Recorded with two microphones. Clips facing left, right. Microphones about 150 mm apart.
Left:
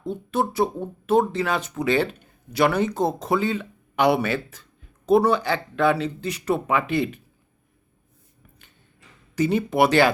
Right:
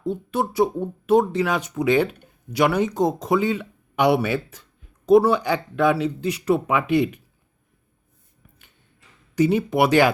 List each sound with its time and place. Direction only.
0.0 s speech: 10° right (ahead or behind)
9.3 s speech: 10° right (ahead or behind)